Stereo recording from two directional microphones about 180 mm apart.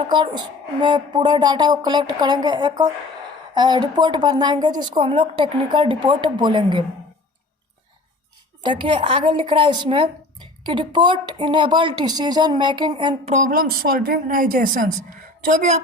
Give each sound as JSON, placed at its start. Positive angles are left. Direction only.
{"t": 0.1, "sound": "speech", "side_deg": -25}
{"t": 8.6, "sound": "speech", "side_deg": -25}
{"t": 13.2, "sound": "speech", "side_deg": -45}